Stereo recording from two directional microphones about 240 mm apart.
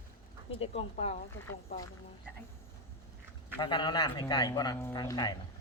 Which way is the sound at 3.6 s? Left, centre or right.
Centre.